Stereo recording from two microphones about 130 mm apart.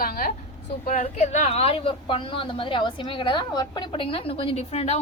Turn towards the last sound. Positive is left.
turn(degrees=55)  # may be behind; listen again after turning